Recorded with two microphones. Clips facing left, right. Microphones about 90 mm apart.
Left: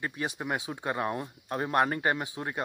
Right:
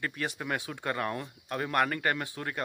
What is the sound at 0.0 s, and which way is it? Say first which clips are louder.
Speech: left 1 dB; 20° left (ahead or behind).